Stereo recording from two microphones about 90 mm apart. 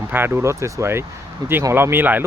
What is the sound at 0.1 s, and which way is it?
Speech, 25° right (ahead or behind).